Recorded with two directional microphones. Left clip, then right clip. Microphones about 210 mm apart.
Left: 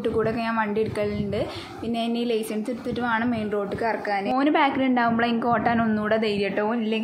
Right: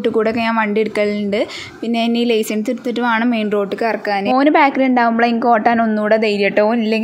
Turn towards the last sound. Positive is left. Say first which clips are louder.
# right 10 dB
turn(degrees=-40)  # may be behind; listen again after turning